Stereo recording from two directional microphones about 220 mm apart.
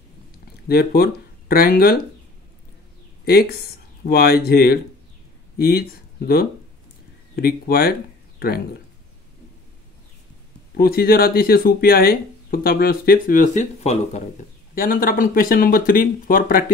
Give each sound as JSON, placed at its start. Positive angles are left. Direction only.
{"t": 0.7, "sound": "speech", "side_deg": 45}
{"t": 3.3, "sound": "speech", "side_deg": 45}
{"t": 10.8, "sound": "speech", "side_deg": 45}